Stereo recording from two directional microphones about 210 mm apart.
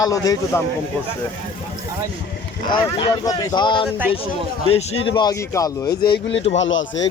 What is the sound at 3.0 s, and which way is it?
Speech, 20° left (ahead or behind).